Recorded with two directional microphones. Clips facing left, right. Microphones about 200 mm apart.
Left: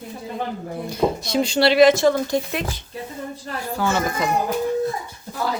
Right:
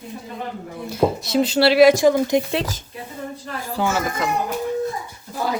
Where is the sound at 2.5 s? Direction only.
30° right (ahead or behind).